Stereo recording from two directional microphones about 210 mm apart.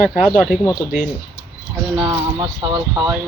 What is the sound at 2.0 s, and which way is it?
Speech, 20° right (ahead or behind).